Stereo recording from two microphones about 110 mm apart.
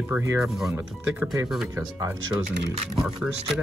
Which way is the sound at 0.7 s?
15° right (ahead or behind).